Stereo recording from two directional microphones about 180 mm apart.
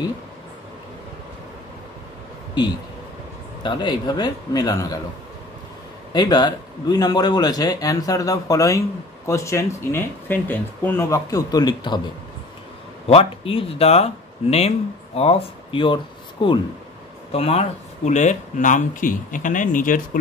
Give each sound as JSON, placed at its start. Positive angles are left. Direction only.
{"t": 3.6, "sound": "a man's voice", "side_deg": 25}
{"t": 6.1, "sound": "a man's voice", "side_deg": 25}
{"t": 13.0, "sound": "speech", "side_deg": 35}